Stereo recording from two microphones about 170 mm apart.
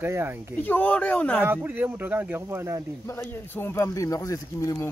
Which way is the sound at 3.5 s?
10° left (ahead or behind).